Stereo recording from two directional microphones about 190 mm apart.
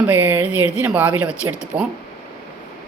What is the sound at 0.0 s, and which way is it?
Speech, 10° right (ahead or behind).